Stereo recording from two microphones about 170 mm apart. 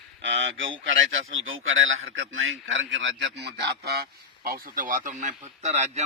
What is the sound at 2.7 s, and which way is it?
A man's voice, 90° right.